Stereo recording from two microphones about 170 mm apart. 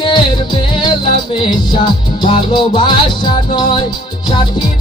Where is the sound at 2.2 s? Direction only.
25° left (ahead or behind).